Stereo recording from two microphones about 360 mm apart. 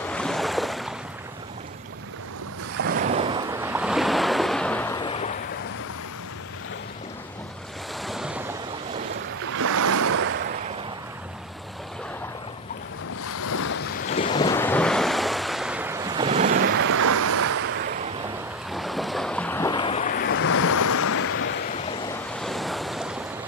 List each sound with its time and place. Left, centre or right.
0.0 s boat: centre
2.8 s waves: right; by 5.3 s centre
8.0 s waves: centre
9.6 s waves: right
13.4 s waves: left
14.0 s waves: centre; by 16.7 s right
16.7 s waves: right
18.7 s boat: centre; by 21.5 s left
22.3 s waves: centre